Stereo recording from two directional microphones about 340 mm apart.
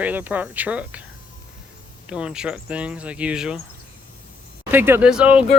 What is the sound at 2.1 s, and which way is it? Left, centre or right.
Speech, centre.